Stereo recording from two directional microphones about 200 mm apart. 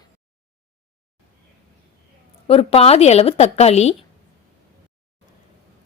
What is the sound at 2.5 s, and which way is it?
Speech, 30° left (ahead or behind).